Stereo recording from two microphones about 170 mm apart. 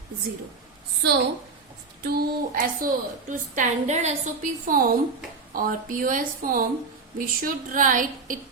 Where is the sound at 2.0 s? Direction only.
60° right (ahead or behind); by 4.1 s 40° right (ahead or behind).